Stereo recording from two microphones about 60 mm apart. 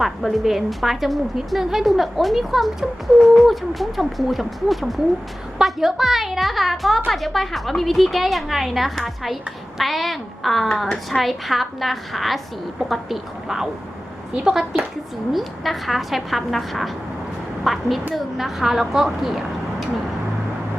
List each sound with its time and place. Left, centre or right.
0.0 s a woman's voice: centre